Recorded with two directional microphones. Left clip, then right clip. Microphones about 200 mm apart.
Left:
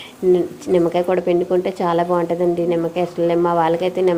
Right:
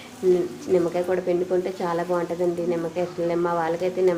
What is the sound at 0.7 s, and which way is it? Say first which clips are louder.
Speech: left 6 dB; 40° left (ahead or behind).